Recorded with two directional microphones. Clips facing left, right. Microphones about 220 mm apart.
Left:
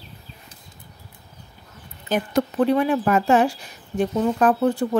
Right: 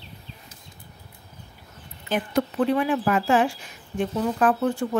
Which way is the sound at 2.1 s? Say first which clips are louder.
Left 2 dB; 40° left (ahead or behind).